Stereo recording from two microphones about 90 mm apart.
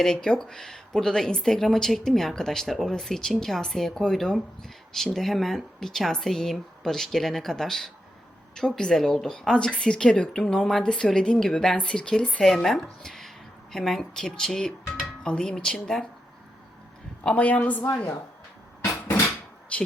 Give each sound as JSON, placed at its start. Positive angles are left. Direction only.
{"t": 0.0, "sound": "a woman's voice", "side_deg": 5}
{"t": 17.2, "sound": "a woman's voice", "side_deg": 15}
{"t": 19.7, "sound": "speech", "side_deg": 15}